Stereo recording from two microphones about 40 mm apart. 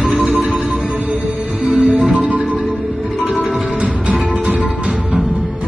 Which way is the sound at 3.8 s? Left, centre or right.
Right.